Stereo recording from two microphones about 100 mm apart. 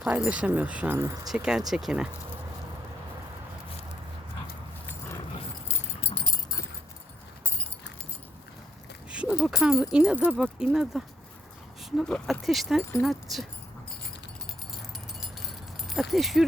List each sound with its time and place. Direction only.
0.0 s speech: 10° right (ahead or behind)
0.9 s speech: 30° right (ahead or behind)
1.3 s speech: 5° right (ahead or behind)
5.6 s keys jangling: 75° left (ahead or behind)
6.2 s keys jangling: 40° left (ahead or behind)
9.0 s a sound: 10° right (ahead or behind)
9.5 s speech: 5° right (ahead or behind)
11.8 s a sound: centre (ahead or behind)
12.0 s speech: 5° left (ahead or behind)
15.9 s speech: centre (ahead or behind)